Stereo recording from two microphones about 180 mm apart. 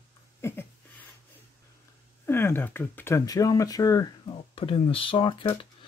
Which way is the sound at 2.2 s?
10° left (ahead or behind).